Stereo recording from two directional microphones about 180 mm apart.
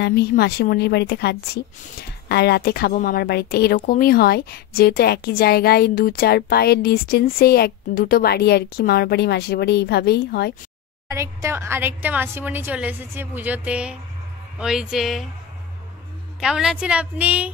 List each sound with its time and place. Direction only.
0.0 s a woman's voice: 65° left (ahead or behind)
11.1 s a woman's voice: 15° right (ahead or behind); by 15.2 s centre (ahead or behind)
16.3 s a woman's voice: 5° right (ahead or behind)